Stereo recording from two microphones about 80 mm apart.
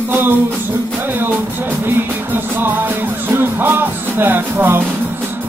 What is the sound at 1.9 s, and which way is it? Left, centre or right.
Music, right.